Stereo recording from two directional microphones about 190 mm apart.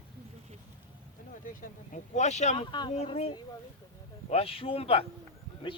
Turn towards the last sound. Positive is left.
turn(degrees=30)  # may be behind; listen again after turning